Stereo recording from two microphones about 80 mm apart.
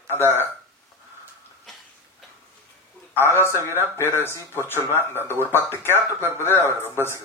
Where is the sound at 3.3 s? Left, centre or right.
Left.